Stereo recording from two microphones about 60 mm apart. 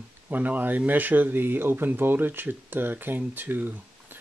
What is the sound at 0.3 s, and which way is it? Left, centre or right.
Speech, right.